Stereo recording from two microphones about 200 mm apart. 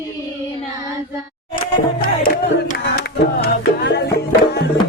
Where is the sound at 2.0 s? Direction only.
45° left (ahead or behind).